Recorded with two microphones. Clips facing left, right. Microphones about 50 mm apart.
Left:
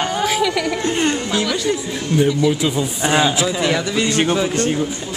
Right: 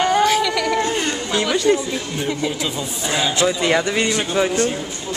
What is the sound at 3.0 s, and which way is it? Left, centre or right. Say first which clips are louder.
Speech: left 5 dB; left.